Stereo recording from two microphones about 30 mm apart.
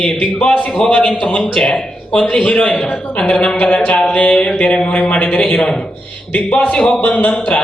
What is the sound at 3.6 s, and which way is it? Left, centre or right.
Speech, left.